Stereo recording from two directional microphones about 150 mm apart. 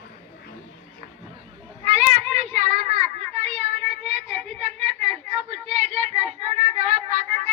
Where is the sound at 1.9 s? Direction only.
50° right (ahead or behind).